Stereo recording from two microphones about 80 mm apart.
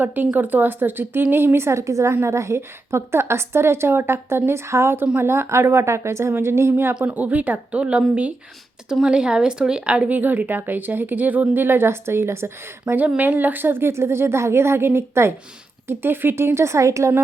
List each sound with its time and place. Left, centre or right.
0.0 s a woman's voice: right
7.0 s a woman's voice: centre; by 17.2 s right